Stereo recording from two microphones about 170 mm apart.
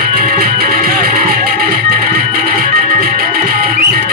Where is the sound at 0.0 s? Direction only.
60° right (ahead or behind).